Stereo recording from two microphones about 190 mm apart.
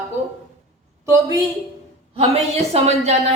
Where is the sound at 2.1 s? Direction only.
30° right (ahead or behind).